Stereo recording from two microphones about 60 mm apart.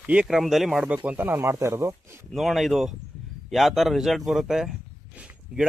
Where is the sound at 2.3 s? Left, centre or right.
Centre.